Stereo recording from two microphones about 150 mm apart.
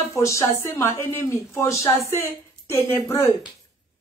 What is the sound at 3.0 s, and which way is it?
Speech, 20° left (ahead or behind).